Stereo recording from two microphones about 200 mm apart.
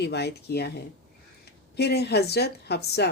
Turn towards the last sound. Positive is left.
turn(degrees=55)  # may be behind; listen again after turning